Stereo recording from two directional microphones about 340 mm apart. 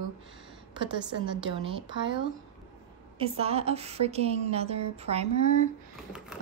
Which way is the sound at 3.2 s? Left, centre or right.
Centre.